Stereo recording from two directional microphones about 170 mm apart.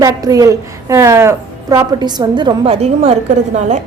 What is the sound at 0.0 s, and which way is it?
A woman's voice, 20° right (ahead or behind).